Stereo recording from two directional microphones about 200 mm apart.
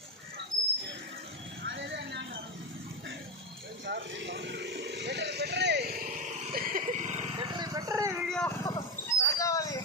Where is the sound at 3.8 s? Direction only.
65° right (ahead or behind); by 8.1 s 15° right (ahead or behind).